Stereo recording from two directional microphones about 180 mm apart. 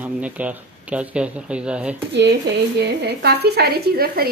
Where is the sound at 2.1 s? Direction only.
70° right (ahead or behind).